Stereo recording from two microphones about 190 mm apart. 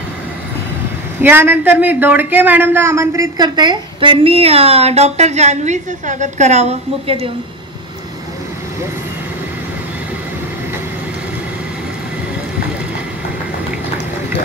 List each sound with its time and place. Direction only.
1.2 s speech: 10° right (ahead or behind); by 7.2 s 35° right (ahead or behind)